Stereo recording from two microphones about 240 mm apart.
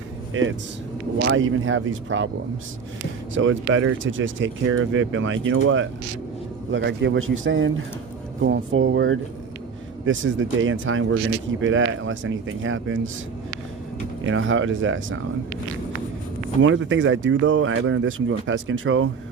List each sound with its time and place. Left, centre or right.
0.4 s speech: right
3.3 s speech: right
14.3 s speech: right
16.6 s speech: right